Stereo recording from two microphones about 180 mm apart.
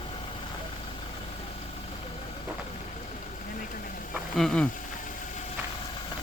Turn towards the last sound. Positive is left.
turn(degrees=5)  # may be behind; listen again after turning